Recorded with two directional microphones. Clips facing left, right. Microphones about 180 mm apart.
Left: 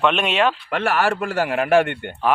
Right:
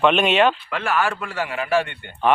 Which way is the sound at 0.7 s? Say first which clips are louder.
Left 3 dB; 50° left (ahead or behind).